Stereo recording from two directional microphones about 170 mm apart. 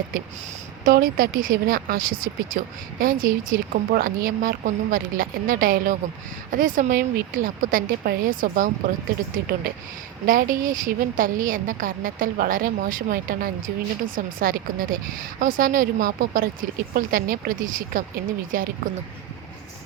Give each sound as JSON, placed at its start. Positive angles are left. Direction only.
{"t": 0.9, "sound": "a woman's voice", "side_deg": -55}